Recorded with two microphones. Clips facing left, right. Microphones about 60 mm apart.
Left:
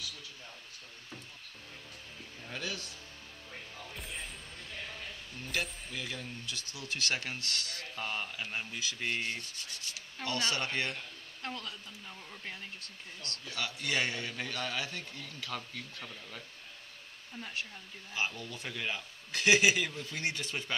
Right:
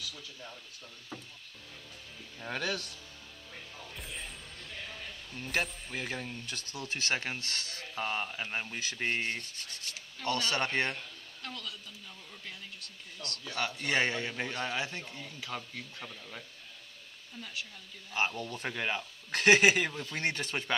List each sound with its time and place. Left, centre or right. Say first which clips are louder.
2.4 s speech: right 6 dB; right
3.5 s music: left 1 dB; centre
5.9 s speech: right 3 dB; right
8.7 s speech: right 2 dB; right
11.4 s speech: left 2 dB; left
13.5 s a man's voice: right 3 dB; right; by 16.4 s centre
17.4 s speech: left 2 dB; left
18.1 s speech: right 4 dB; right